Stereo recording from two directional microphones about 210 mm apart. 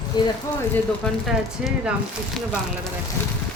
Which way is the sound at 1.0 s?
Centre (ahead or behind).